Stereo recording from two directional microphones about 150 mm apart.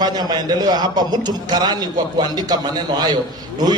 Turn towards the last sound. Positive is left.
turn(degrees=-25)  # may be behind; listen again after turning